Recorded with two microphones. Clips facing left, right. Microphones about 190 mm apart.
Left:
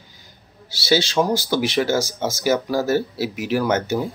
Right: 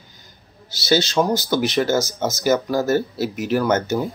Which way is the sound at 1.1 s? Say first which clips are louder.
Right 1 dB; 10° left (ahead or behind).